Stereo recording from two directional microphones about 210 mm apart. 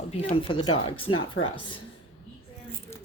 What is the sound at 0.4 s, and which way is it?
A woman's voice, 25° left (ahead or behind).